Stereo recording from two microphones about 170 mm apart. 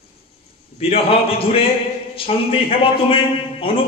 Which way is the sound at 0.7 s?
35° left (ahead or behind).